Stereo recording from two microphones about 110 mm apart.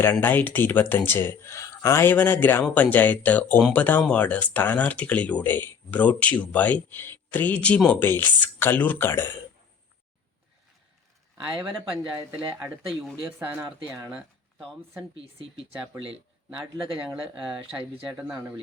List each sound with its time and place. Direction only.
0.0 s speech: 20° left (ahead or behind)
11.4 s speech: 5° right (ahead or behind)
15.2 s speech: 60° right (ahead or behind)
18.2 s speech: 10° right (ahead or behind)